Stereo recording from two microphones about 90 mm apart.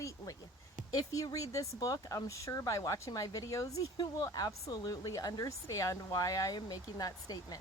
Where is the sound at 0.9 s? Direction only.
40° left (ahead or behind).